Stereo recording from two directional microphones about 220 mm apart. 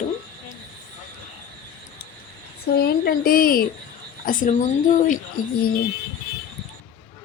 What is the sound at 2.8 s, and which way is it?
A woman's voice, 40° left (ahead or behind).